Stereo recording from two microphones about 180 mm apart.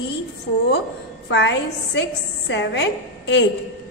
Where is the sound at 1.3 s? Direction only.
80° left.